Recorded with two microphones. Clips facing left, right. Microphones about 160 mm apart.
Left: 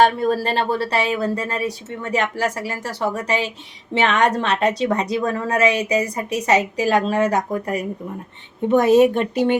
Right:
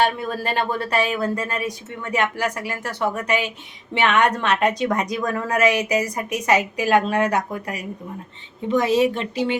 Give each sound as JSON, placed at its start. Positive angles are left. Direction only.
{"t": 0.0, "sound": "a woman's voice", "side_deg": 40}